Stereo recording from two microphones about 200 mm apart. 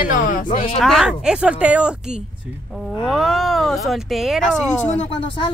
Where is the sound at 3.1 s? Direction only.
Centre (ahead or behind).